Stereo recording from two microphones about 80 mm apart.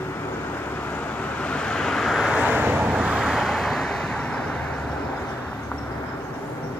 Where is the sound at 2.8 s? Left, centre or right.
Centre.